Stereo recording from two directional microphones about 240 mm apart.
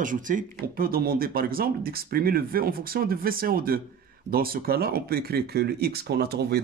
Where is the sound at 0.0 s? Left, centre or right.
Right.